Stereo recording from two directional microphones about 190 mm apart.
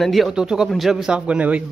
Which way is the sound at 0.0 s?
Centre (ahead or behind).